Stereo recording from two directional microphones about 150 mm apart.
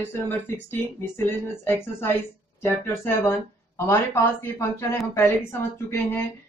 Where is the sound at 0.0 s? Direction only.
15° left (ahead or behind).